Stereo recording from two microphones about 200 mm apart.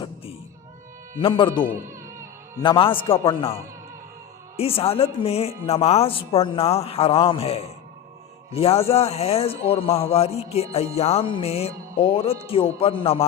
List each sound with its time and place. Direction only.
1.2 s music: 25° left (ahead or behind)
2.6 s music: 25° left (ahead or behind)
4.5 s music: 30° left (ahead or behind)
5.2 s a man's voice: 30° left (ahead or behind)
5.6 s music: 30° left (ahead or behind)
8.5 s a man's voice: 30° left (ahead or behind)
10.9 s music: 30° left (ahead or behind)